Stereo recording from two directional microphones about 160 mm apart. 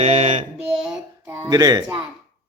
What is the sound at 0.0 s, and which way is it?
Mantra, 40° right (ahead or behind).